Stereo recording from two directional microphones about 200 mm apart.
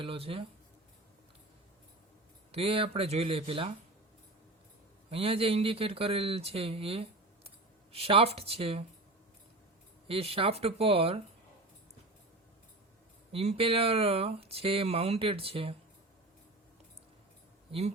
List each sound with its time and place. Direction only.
0.0 s speech: 30° right (ahead or behind)
2.5 s speech: 30° right (ahead or behind)
5.1 s speech: 30° right (ahead or behind)
10.1 s speech: 30° right (ahead or behind)
13.3 s speech: 30° right (ahead or behind)
17.7 s speech: 30° right (ahead or behind)